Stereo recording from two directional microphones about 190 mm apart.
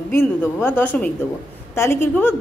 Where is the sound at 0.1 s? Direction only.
10° left (ahead or behind).